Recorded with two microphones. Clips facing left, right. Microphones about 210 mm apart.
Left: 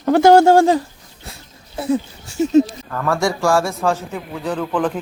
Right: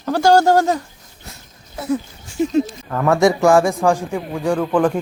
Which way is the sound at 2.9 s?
20° right (ahead or behind).